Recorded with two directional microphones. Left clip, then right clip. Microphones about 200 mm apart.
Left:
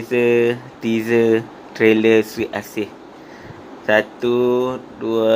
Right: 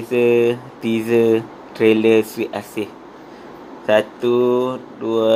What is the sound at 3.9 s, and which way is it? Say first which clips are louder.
Speech: right 1 dB; 10° left (ahead or behind).